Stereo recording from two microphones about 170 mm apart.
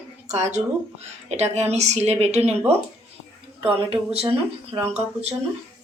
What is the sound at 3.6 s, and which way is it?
Speech, 35° right (ahead or behind).